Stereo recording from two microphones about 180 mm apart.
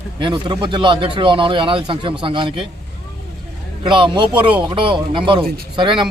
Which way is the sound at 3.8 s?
25° right (ahead or behind).